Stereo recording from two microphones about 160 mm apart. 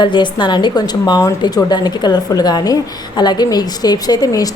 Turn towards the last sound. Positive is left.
turn(degrees=25)  # may be behind; listen again after turning